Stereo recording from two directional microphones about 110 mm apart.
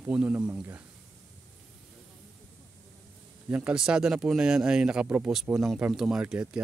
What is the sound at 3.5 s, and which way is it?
Speech, 10° right (ahead or behind).